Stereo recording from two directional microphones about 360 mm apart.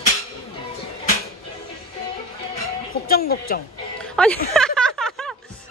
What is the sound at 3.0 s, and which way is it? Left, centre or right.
Speech, left.